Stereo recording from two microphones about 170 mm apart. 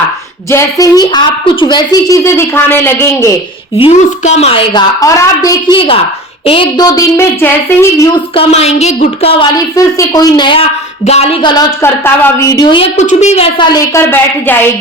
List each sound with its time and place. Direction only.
0.5 s a woman's voice: 20° left (ahead or behind)
3.8 s speech: 40° left (ahead or behind)
4.9 s a woman's voice: 20° left (ahead or behind)
8.4 s speech: 40° left (ahead or behind)
9.7 s a woman's voice: 20° left (ahead or behind); by 11.5 s 35° left (ahead or behind)
11.5 s a woman's voice: 15° left (ahead or behind)
13.0 s a woman's voice: 45° left (ahead or behind); by 14.7 s 15° left (ahead or behind)